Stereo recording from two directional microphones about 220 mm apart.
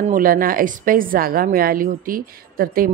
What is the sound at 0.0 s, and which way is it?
A woman's voice, 40° right (ahead or behind).